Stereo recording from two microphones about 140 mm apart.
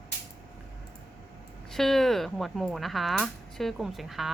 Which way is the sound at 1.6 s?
Centre (ahead or behind).